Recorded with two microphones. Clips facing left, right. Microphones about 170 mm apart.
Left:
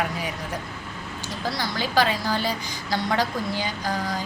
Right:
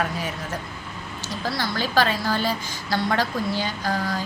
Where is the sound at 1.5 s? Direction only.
15° left (ahead or behind).